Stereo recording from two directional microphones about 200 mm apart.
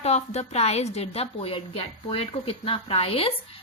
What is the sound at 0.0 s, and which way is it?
A woman's voice, 35° left (ahead or behind).